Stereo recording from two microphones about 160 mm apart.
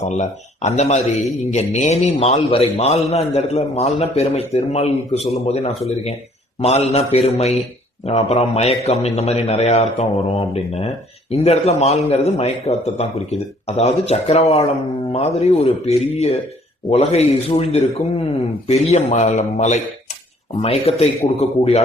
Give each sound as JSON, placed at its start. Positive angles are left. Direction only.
{"t": 0.1, "sound": "a man's voice", "side_deg": 45}